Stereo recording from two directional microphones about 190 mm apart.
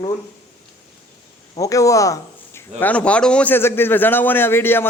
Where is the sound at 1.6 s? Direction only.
15° left (ahead or behind).